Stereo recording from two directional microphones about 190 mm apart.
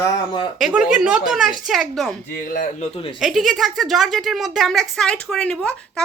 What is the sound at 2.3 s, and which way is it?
Speech, 45° left (ahead or behind).